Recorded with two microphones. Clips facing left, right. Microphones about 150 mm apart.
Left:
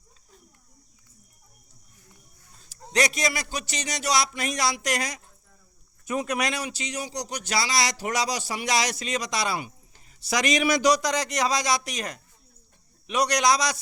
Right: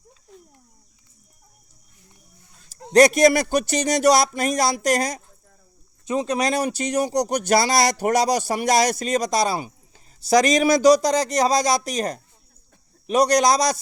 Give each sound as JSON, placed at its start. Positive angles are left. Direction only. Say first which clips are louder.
{"t": 2.9, "sound": "speech", "louder": "right 12 dB", "side_deg": -50}
{"t": 6.1, "sound": "speech", "louder": "right 5 dB", "side_deg": -25}
{"t": 6.5, "sound": "speech", "louder": "right 10 dB", "side_deg": -50}